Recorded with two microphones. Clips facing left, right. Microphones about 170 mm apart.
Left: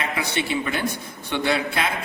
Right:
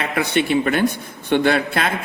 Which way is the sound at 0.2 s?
60° right (ahead or behind).